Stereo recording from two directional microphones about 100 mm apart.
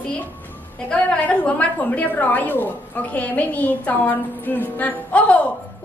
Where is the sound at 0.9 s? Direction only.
10° left (ahead or behind).